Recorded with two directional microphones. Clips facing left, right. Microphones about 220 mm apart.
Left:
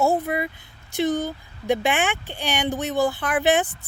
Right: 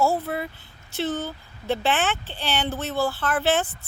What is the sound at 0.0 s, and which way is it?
A woman's voice, 15° left (ahead or behind).